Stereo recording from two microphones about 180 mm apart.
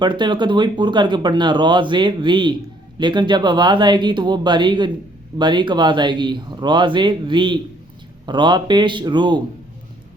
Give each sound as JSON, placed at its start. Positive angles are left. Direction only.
{"t": 0.0, "sound": "speech", "side_deg": -25}